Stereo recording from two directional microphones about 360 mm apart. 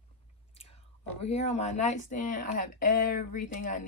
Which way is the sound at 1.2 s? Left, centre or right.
Centre.